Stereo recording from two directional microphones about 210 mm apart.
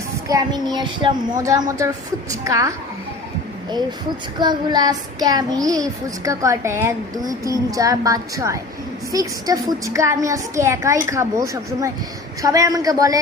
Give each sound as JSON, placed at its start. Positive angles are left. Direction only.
{"t": 0.3, "sound": "a child's voice", "side_deg": -20}
{"t": 2.3, "sound": "child singing", "side_deg": -15}
{"t": 4.4, "sound": "child singing", "side_deg": -20}